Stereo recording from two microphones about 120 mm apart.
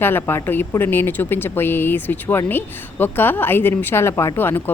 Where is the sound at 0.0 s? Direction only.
20° left (ahead or behind).